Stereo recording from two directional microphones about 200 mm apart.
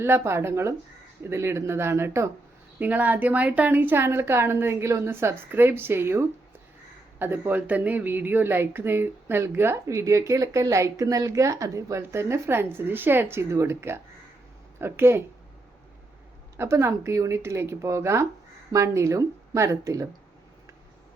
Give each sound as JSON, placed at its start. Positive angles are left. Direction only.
{"t": 0.0, "sound": "speech", "side_deg": -10}
{"t": 16.6, "sound": "speech", "side_deg": -15}